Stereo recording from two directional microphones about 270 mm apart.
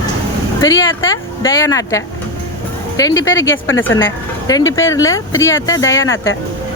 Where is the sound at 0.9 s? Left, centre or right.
Left.